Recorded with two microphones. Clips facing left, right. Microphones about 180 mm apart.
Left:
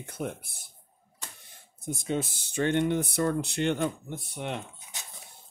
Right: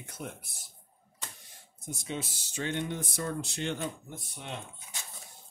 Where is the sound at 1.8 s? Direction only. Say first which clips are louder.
Left 7 dB; 55° left (ahead or behind).